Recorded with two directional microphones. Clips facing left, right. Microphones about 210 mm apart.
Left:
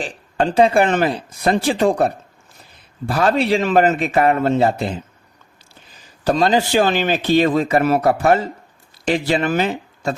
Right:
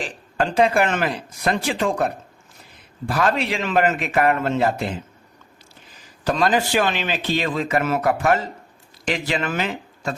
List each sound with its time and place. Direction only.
0.3 s speech: 30° left (ahead or behind)
6.2 s speech: 30° left (ahead or behind)